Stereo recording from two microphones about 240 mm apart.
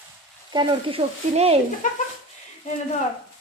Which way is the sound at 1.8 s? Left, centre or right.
Left.